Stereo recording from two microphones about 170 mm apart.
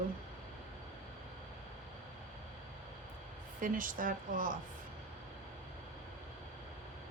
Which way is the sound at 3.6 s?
55° right (ahead or behind).